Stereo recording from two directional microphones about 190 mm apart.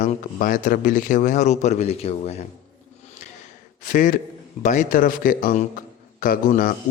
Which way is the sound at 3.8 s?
45° left (ahead or behind).